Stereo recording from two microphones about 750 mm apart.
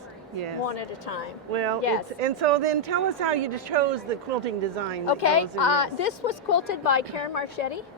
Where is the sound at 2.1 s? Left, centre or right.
Right.